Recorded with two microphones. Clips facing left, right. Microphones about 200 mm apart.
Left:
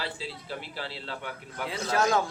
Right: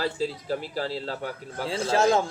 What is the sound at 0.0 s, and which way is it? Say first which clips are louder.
A man's voice: right 9 dB; 45° right (ahead or behind).